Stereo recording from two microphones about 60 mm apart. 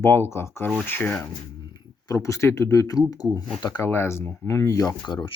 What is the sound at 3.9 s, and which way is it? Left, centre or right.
Speech, left.